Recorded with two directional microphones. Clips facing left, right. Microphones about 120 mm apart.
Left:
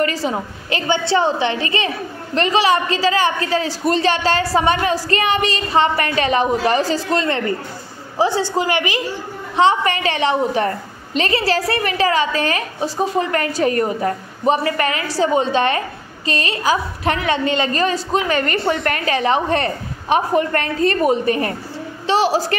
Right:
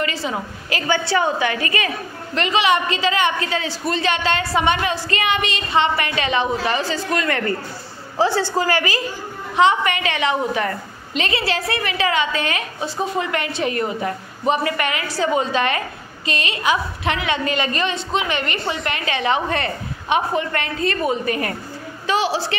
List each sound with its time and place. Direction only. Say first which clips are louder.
0.0 s a woman's voice: left 4 dB; 35° left (ahead or behind); by 9.0 s 20° left (ahead or behind)
9.6 s a woman's voice: left 1 dB; 30° left (ahead or behind)